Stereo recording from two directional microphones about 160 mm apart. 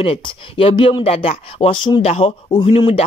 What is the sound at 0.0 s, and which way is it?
A man's voice, 35° left (ahead or behind).